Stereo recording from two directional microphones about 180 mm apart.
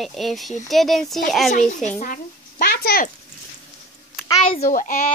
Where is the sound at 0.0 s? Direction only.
Centre (ahead or behind).